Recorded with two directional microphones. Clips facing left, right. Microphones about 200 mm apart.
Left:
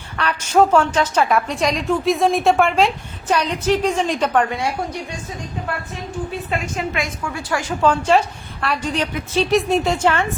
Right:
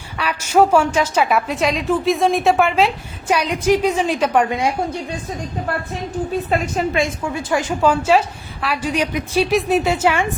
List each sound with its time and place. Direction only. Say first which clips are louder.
0.2 s a woman's voice: right 1 dB; 10° right (ahead or behind)
6.5 s a woman's voice: right 4 dB; 30° right (ahead or behind)
7.8 s a woman's voice: even; 5° right (ahead or behind)